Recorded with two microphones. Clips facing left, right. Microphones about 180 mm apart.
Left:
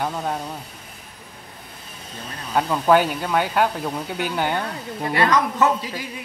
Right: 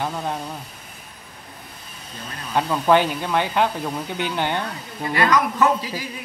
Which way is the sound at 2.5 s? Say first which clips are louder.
Even; 5° left (ahead or behind).